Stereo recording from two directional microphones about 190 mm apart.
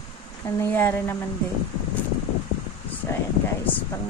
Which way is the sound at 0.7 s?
10° left (ahead or behind).